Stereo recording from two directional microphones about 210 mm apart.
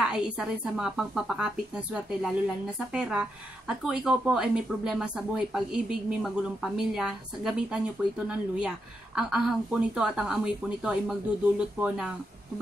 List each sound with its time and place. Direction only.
0.0 s speech: 5° right (ahead or behind)